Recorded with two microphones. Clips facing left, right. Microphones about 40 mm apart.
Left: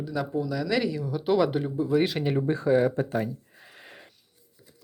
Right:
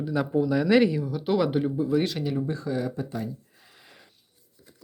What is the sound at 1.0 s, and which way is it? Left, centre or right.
Speech, centre.